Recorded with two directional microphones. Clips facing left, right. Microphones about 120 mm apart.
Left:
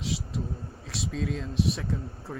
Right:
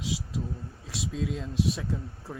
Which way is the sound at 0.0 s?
60° left (ahead or behind).